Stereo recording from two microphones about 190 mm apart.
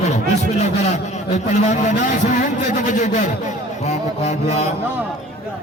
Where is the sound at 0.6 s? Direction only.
35° left (ahead or behind).